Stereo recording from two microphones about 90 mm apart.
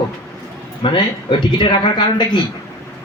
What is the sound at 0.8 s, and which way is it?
A man's voice, 70° left (ahead or behind).